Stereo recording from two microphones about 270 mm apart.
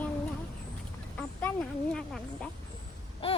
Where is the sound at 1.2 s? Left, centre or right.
Centre.